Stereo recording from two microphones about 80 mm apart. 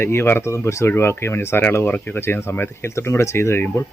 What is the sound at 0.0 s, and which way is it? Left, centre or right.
Speech, left.